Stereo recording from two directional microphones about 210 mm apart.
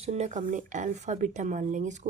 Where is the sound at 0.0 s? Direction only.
30° right (ahead or behind).